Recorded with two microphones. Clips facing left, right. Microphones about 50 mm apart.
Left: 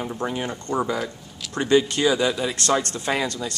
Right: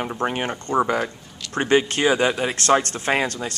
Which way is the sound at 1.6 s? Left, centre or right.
Right.